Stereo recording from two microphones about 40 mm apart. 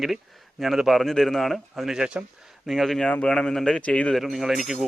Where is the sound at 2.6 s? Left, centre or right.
Centre.